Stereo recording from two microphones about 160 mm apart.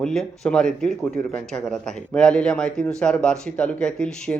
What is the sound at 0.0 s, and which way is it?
Speech, 5° left (ahead or behind).